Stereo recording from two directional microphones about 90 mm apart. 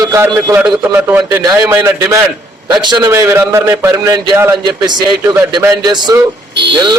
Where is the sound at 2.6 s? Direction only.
50° right (ahead or behind).